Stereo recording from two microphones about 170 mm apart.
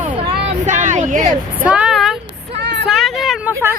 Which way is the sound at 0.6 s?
45° right (ahead or behind).